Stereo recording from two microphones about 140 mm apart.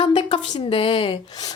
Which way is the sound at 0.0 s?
35° left (ahead or behind).